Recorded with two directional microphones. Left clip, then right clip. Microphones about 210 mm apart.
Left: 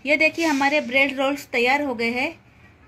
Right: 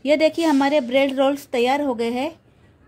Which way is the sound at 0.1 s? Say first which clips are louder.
Right 2 dB; 50° right (ahead or behind).